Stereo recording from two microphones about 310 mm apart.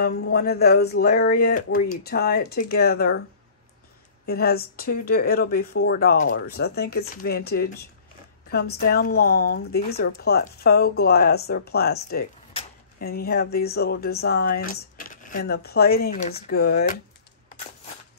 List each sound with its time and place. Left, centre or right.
0.0 s speech: left
4.3 s speech: left